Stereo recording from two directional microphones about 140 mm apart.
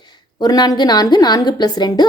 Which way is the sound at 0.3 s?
30° left (ahead or behind).